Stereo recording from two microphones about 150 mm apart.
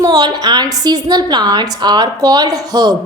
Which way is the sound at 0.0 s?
25° right (ahead or behind).